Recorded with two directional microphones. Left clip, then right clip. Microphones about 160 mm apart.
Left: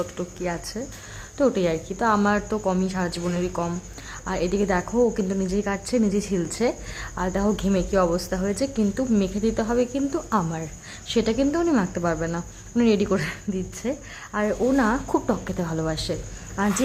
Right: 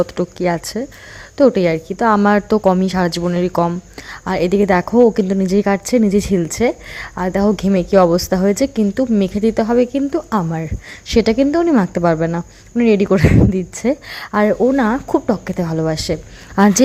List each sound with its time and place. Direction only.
0.0 s speech: 45° right (ahead or behind)
14.6 s speech: 35° right (ahead or behind)
16.6 s speech: 55° right (ahead or behind)